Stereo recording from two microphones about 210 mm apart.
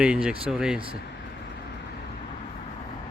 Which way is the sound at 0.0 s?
5° right (ahead or behind).